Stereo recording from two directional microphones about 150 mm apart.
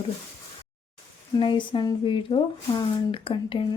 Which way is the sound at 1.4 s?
35° left (ahead or behind).